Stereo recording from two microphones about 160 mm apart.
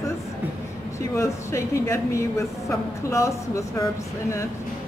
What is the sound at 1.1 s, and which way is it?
A woman's voice, 20° left (ahead or behind).